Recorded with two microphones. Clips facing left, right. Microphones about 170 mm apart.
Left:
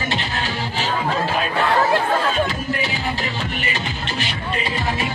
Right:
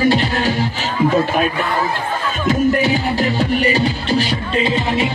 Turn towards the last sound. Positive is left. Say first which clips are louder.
# right 7 dB
turn(degrees=-25)  # may be behind; listen again after turning